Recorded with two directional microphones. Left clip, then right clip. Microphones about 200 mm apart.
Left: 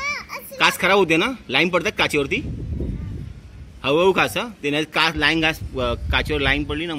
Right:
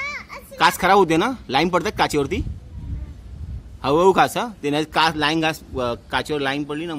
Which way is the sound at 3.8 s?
30° right (ahead or behind).